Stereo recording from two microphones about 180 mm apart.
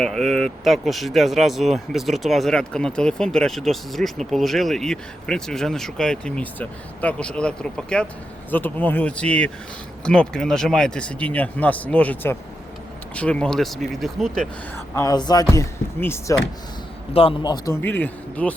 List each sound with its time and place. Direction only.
0.0 s speech: centre (ahead or behind)
14.9 s speech: 20° left (ahead or behind)
17.2 s a man's voice: 25° left (ahead or behind)
17.8 s speech: 10° left (ahead or behind)